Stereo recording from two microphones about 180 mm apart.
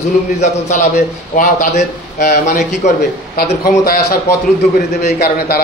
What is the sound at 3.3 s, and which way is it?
A man's voice, 55° left (ahead or behind).